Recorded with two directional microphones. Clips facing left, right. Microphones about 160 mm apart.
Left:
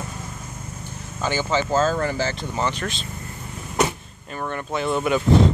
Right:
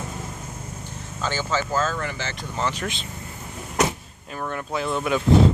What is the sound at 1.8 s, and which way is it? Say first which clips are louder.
Speech: left 5 dB; 35° left (ahead or behind).